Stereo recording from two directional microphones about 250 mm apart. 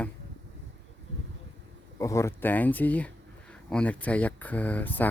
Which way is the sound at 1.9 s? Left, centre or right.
Centre.